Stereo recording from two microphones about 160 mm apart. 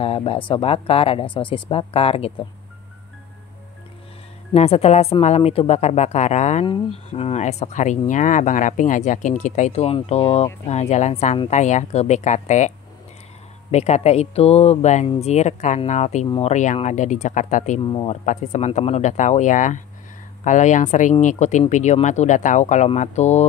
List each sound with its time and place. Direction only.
0.0 s speech: 35° left (ahead or behind)
4.6 s speech: 40° left (ahead or behind)